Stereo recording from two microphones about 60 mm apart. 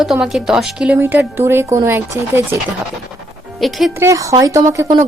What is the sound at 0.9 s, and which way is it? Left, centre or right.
Speech, right.